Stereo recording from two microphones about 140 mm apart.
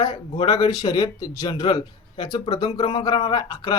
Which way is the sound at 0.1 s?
40° left (ahead or behind).